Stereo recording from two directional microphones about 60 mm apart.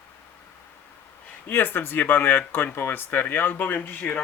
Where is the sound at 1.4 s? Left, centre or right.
Left.